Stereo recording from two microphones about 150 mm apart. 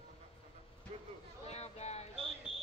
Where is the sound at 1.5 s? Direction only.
45° left (ahead or behind).